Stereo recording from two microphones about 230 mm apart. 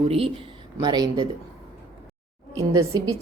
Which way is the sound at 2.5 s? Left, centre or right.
Centre.